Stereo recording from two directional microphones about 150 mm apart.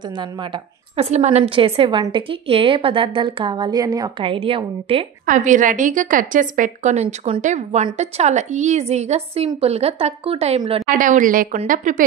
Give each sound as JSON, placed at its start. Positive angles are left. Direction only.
{"t": 0.2, "sound": "a woman's voice", "side_deg": -30}
{"t": 0.9, "sound": "a woman's voice", "side_deg": -50}
{"t": 5.2, "sound": "a woman's voice", "side_deg": -60}
{"t": 10.9, "sound": "a woman's voice", "side_deg": -60}